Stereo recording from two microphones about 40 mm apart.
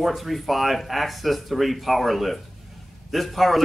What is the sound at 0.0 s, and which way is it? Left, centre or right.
Speech, centre.